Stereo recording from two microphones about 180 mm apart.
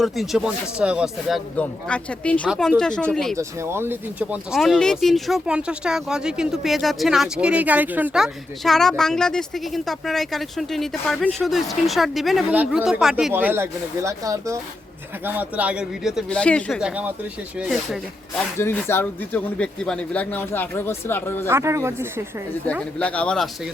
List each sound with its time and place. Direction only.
0.0 s speech: centre (ahead or behind)
3.3 s speech: 15° right (ahead or behind)
13.3 s speech: 10° right (ahead or behind); by 16.8 s 5° left (ahead or behind)
16.8 s speech: 5° right (ahead or behind)
18.6 s speech: 15° left (ahead or behind)
21.4 s speech: 15° right (ahead or behind)
23.0 s speech: 5° left (ahead or behind)